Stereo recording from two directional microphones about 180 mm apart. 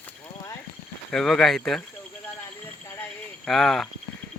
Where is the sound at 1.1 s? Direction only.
5° left (ahead or behind).